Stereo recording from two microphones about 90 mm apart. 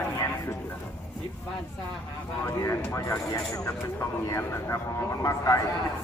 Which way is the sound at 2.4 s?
30° left (ahead or behind).